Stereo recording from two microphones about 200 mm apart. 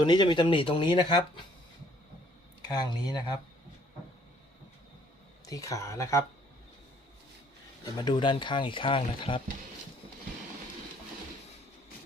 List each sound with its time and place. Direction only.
0.0 s speech: 20° left (ahead or behind)
2.6 s speech: 20° left (ahead or behind)
5.5 s speech: 15° left (ahead or behind)
7.9 s speech: 25° left (ahead or behind)